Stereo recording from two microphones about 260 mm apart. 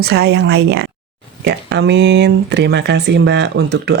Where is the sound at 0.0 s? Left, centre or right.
Right.